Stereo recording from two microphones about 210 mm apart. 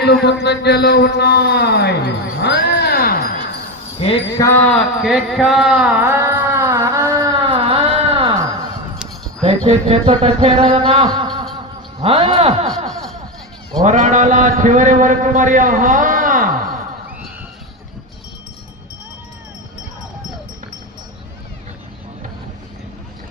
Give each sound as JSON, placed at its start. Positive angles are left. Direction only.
{"t": 0.0, "sound": "speech", "side_deg": 50}
{"t": 3.9, "sound": "speech", "side_deg": 25}
{"t": 4.4, "sound": "a sound", "side_deg": 10}
{"t": 9.6, "sound": "music", "side_deg": -25}
{"t": 11.9, "sound": "a man's voice", "side_deg": -25}
{"t": 12.6, "sound": "a sound", "side_deg": 0}
{"t": 13.8, "sound": "a man's voice", "side_deg": -35}